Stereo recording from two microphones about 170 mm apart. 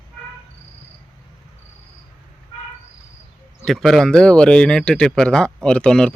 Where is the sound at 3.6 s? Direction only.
Centre (ahead or behind).